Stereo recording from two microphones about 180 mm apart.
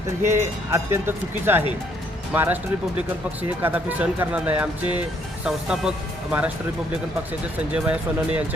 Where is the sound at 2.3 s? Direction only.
10° right (ahead or behind).